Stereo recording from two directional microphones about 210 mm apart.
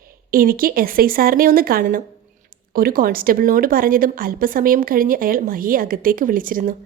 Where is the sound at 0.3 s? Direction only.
45° right (ahead or behind).